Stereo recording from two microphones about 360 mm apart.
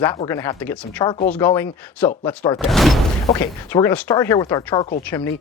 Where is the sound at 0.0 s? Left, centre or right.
Centre.